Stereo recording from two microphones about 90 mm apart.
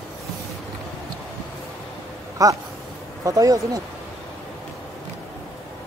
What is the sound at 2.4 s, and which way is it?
Speech, 40° right (ahead or behind).